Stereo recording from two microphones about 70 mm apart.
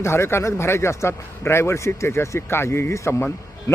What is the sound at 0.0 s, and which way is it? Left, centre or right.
A man's voice, left.